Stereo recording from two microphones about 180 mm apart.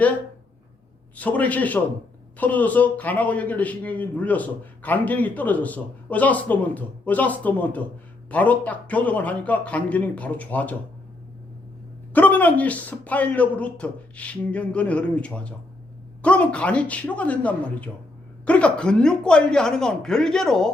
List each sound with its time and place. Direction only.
1.1 s a man's voice: 10° left (ahead or behind)
12.1 s a man's voice: 10° left (ahead or behind)